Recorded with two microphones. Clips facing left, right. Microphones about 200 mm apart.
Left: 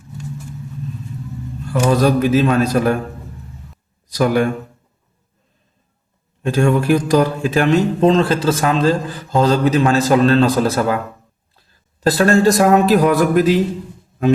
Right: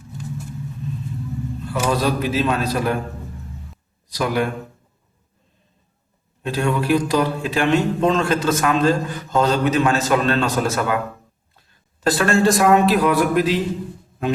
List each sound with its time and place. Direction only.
1.6 s a man's voice: 45° left (ahead or behind)
4.1 s a man's voice: 45° left (ahead or behind)
6.4 s a man's voice: 45° left (ahead or behind)